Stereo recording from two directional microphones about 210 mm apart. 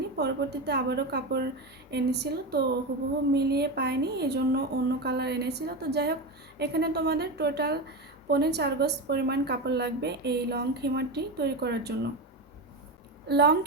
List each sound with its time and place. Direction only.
0.2 s a woman's voice: 50° right (ahead or behind)
13.2 s a woman's voice: 50° right (ahead or behind)